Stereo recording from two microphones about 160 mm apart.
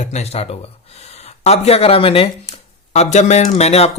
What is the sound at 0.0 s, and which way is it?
Speech, 45° left (ahead or behind).